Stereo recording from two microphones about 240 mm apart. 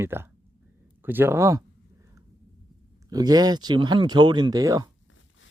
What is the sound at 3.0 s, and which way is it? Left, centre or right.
Speech, centre.